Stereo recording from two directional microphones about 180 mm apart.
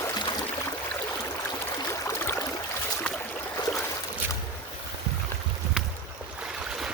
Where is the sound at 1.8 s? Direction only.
15° left (ahead or behind).